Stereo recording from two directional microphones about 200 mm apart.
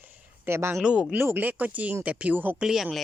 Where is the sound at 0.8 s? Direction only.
5° right (ahead or behind).